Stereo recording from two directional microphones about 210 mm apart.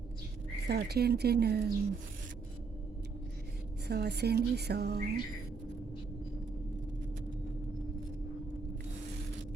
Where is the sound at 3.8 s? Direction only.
50° right (ahead or behind).